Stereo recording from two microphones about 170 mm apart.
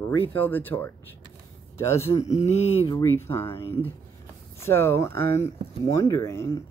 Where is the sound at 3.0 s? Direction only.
15° left (ahead or behind).